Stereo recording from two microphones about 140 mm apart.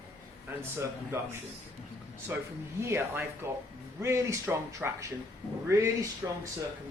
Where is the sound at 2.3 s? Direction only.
15° right (ahead or behind).